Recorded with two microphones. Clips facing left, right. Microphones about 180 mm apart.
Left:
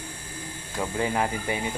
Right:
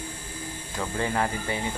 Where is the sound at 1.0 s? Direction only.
15° left (ahead or behind).